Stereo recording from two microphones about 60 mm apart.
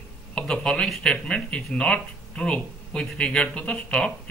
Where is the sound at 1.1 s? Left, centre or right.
Centre.